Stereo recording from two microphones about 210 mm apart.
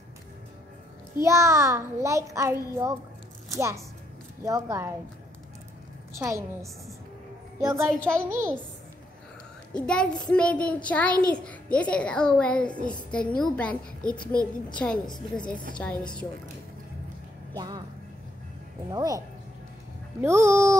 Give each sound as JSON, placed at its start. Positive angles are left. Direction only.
{"t": 1.2, "sound": "a child's voice", "side_deg": -15}
{"t": 6.1, "sound": "a child's voice", "side_deg": -15}
{"t": 9.8, "sound": "a child's voice", "side_deg": 5}
{"t": 17.6, "sound": "speech", "side_deg": -20}
{"t": 18.9, "sound": "a child's voice", "side_deg": -15}